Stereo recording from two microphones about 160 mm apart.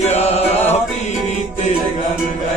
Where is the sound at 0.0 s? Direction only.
40° left (ahead or behind).